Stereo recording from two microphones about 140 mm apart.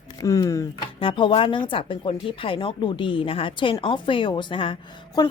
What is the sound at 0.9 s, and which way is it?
A woman's voice, 40° left (ahead or behind).